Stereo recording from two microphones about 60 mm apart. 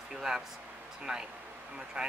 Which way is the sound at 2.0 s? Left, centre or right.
Centre.